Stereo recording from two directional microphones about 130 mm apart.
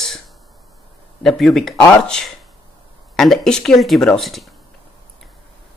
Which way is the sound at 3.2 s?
5° left (ahead or behind).